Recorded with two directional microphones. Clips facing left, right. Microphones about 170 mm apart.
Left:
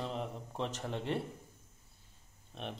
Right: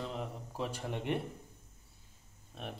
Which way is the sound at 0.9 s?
15° right (ahead or behind).